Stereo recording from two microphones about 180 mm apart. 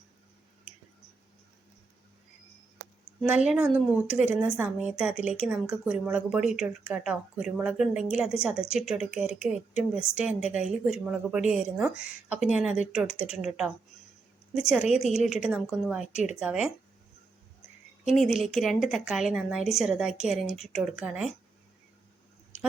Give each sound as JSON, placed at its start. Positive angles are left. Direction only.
{"t": 3.2, "sound": "speech", "side_deg": -5}
{"t": 18.2, "sound": "speech", "side_deg": 0}